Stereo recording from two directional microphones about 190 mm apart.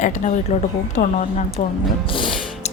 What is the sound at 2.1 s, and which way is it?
Music, 25° left (ahead or behind).